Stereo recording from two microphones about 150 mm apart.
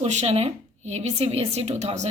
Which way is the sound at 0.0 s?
50° right (ahead or behind).